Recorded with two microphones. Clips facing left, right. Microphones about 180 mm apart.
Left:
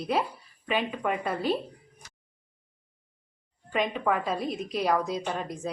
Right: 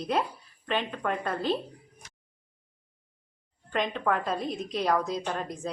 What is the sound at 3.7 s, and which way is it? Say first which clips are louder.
A woman's voice: left 1 dB; 5° left (ahead or behind).